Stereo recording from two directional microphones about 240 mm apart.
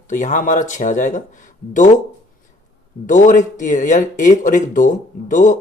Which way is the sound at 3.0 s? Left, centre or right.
Left.